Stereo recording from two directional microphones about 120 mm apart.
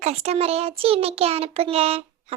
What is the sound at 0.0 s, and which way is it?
A child's voice, 60° right (ahead or behind).